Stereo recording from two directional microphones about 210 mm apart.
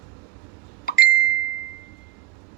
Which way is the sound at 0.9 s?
45° left (ahead or behind).